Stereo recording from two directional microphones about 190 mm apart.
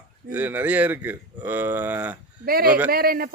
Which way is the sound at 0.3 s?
10° right (ahead or behind).